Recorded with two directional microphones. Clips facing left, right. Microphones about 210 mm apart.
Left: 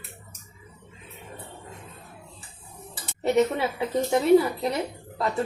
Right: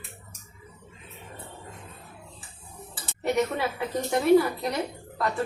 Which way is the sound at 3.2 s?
30° left (ahead or behind).